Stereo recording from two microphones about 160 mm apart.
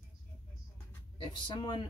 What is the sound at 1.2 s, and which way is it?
Speech, 30° left (ahead or behind).